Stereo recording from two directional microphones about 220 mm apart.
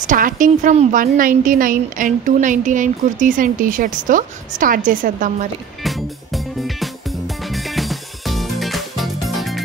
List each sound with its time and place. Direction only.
0.0 s a woman's voice: 35° right (ahead or behind)
5.9 s music: centre (ahead or behind)